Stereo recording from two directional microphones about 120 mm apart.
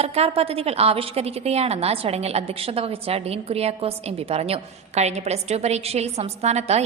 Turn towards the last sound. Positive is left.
turn(degrees=-65)  # may be behind; listen again after turning